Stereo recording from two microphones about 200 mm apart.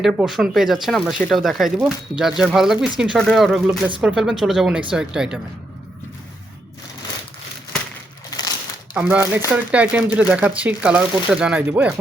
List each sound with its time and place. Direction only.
0.0 s speech: centre (ahead or behind)
8.3 s crushing: 20° left (ahead or behind)
9.0 s speech: 5° right (ahead or behind)